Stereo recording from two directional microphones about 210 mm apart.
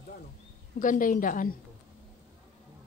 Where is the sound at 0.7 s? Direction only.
40° left (ahead or behind).